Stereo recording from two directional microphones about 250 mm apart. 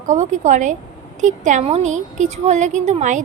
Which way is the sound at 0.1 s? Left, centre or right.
Right.